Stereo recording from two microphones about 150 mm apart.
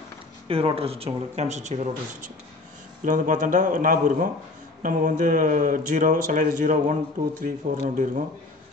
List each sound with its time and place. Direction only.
0.5 s speech: 40° right (ahead or behind); by 8.2 s 60° right (ahead or behind)